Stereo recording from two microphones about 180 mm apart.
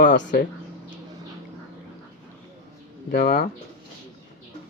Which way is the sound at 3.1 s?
45° left (ahead or behind).